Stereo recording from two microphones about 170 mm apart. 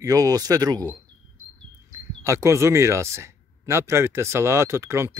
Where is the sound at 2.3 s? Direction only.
15° right (ahead or behind).